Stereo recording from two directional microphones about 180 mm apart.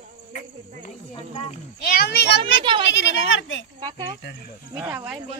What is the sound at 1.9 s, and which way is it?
Speech, 65° left (ahead or behind).